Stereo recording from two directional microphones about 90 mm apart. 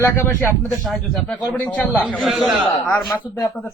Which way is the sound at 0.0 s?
25° left (ahead or behind).